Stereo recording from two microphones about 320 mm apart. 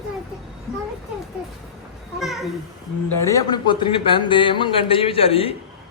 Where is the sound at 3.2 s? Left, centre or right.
Centre.